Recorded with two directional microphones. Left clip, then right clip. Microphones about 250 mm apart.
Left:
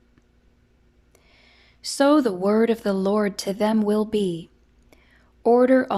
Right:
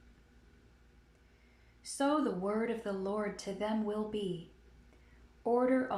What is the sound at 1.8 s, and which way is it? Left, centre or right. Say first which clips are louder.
Speech: left 14 dB; left.